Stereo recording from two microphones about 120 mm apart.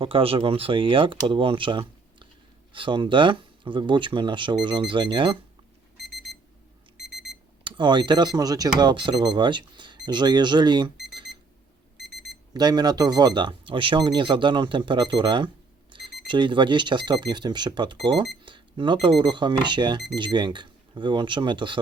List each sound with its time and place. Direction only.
0.0 s speech: 50° right (ahead or behind)
7.6 s speech: 40° right (ahead or behind)
8.8 s speech: 40° right (ahead or behind)
12.5 s speech: 35° right (ahead or behind)